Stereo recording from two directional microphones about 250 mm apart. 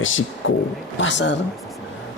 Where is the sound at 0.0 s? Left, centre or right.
Left.